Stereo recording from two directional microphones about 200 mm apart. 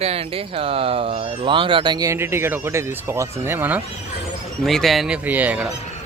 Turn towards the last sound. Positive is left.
turn(degrees=-5)  # may be behind; listen again after turning